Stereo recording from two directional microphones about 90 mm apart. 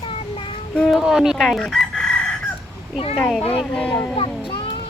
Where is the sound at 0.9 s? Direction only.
5° right (ahead or behind).